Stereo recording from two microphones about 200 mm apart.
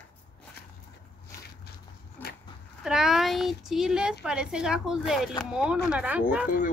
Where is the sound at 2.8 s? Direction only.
Centre (ahead or behind).